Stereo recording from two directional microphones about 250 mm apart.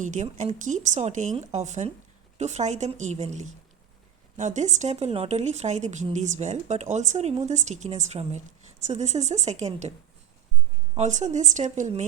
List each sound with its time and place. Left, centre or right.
0.0 s speech: right
10.9 s speech: right